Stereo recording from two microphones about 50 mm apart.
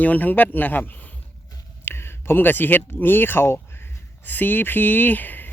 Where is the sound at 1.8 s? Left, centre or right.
Left.